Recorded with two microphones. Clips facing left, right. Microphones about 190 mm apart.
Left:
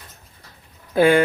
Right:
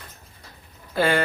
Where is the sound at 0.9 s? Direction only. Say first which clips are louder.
Left 7 dB; 55° left (ahead or behind).